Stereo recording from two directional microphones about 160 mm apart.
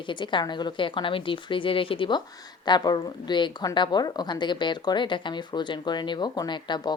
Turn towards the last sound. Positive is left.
turn(degrees=30)  # may be behind; listen again after turning